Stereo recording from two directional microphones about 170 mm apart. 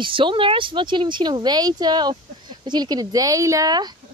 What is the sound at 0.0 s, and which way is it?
Speech, 30° right (ahead or behind).